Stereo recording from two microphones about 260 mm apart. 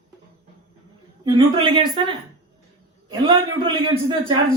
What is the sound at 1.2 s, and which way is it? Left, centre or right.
A man's voice, centre.